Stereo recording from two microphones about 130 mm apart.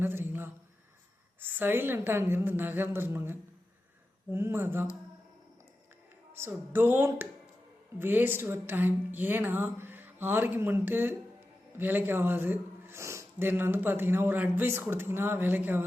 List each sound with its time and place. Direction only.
0.0 s a sound: 15° right (ahead or behind)
1.4 s a man's voice: 15° right (ahead or behind)
6.3 s a man's voice: 15° right (ahead or behind)